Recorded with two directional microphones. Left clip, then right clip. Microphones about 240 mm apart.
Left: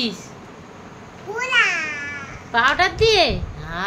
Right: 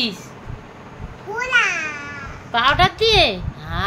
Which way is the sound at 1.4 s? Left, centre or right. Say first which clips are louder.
Even; centre.